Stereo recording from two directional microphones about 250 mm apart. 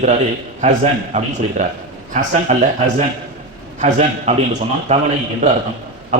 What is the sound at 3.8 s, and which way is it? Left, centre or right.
A man's voice, right.